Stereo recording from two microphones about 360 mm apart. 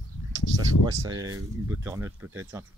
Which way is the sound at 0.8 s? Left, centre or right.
Centre.